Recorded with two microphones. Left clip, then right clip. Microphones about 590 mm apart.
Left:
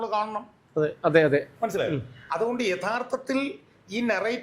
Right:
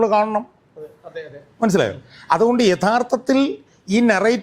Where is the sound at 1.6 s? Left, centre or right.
Right.